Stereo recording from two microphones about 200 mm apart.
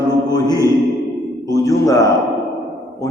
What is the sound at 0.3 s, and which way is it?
Mantra, 20° left (ahead or behind).